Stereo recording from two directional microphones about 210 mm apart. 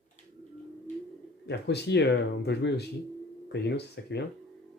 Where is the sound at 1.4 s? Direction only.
50° left (ahead or behind).